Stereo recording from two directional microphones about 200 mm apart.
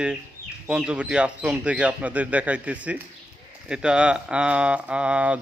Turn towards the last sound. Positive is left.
turn(degrees=-5)  # may be behind; listen again after turning